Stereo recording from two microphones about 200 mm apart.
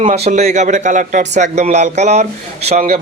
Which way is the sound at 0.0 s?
40° right (ahead or behind).